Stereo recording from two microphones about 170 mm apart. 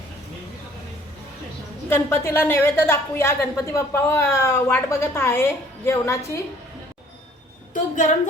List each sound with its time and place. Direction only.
1.9 s a woman's voice: 15° left (ahead or behind)
7.7 s a woman's voice: 45° left (ahead or behind)